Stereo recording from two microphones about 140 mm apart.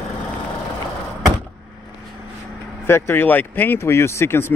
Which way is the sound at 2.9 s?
15° left (ahead or behind).